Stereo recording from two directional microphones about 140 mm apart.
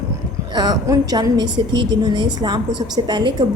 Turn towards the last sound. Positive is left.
turn(degrees=-30)  # may be behind; listen again after turning